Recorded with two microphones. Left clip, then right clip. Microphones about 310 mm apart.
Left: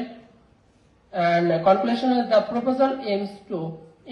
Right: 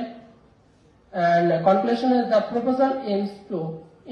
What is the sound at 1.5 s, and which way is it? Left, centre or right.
A man's voice, centre.